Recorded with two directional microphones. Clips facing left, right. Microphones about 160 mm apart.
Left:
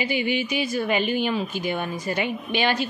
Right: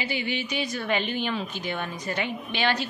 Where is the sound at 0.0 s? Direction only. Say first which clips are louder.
Left 5 dB; 10° left (ahead or behind).